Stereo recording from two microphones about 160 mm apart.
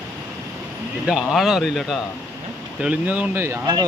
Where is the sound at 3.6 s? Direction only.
25° right (ahead or behind).